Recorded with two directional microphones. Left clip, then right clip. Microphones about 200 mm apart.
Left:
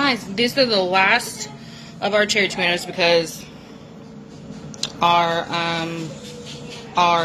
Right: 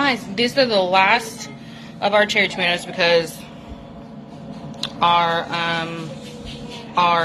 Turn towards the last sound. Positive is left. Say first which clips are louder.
# even
turn(degrees=20)  # may be behind; listen again after turning